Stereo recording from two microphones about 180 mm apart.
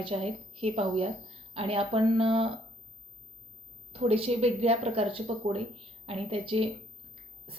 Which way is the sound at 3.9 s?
35° right (ahead or behind).